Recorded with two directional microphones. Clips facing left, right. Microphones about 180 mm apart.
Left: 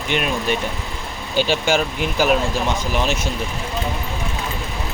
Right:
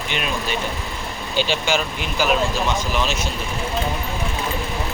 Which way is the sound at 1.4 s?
50° left (ahead or behind).